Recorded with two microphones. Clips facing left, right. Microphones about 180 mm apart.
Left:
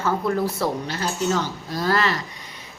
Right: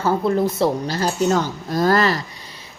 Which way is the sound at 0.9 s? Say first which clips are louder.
Right 5 dB; 45° right (ahead or behind).